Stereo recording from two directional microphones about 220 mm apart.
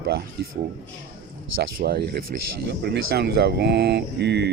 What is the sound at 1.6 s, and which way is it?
Speech, 45° right (ahead or behind).